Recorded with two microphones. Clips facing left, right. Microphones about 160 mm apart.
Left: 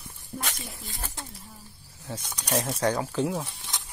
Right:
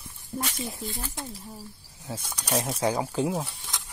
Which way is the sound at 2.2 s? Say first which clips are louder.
Even; 5° right (ahead or behind).